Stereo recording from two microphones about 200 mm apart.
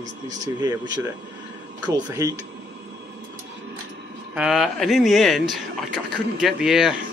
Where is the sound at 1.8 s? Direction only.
15° right (ahead or behind).